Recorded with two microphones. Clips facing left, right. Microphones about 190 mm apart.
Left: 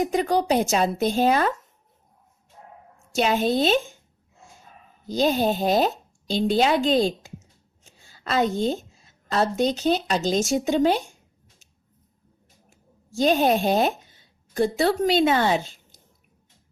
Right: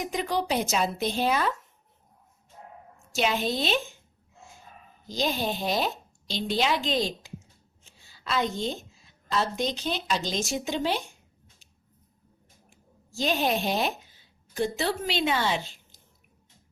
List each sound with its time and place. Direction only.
0.0 s a woman's voice: 45° left (ahead or behind)
3.2 s a woman's voice: 45° left (ahead or behind)
5.2 s a woman's voice: 45° left (ahead or behind)
8.2 s a woman's voice: 45° left (ahead or behind)
13.2 s a woman's voice: 45° left (ahead or behind)